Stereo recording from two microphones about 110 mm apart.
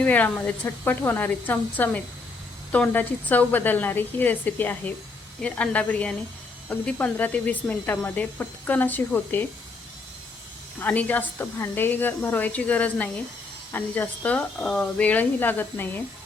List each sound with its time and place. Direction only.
0.0 s speech: 15° left (ahead or behind)
10.8 s speech: 15° left (ahead or behind)